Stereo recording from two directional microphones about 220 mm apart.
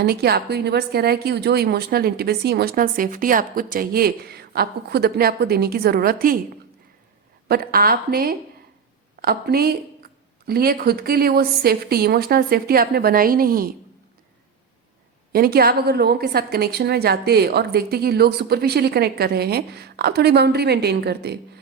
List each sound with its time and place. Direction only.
0.0 s a woman's voice: 45° right (ahead or behind)
7.4 s a woman's voice: 45° right (ahead or behind)
15.3 s a woman's voice: 45° right (ahead or behind)